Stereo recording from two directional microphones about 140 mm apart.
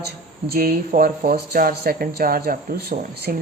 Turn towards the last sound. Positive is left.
turn(degrees=-90)